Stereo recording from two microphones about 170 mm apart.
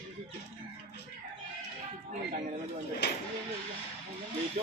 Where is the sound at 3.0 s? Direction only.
80° left.